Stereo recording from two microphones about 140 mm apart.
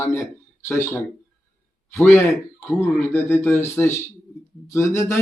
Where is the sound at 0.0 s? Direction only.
20° left (ahead or behind).